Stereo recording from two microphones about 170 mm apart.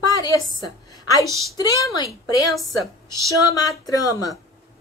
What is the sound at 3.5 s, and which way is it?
Speech, 20° left (ahead or behind).